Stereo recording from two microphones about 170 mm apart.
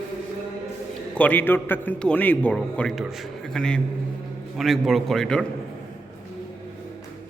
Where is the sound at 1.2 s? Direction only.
10° left (ahead or behind).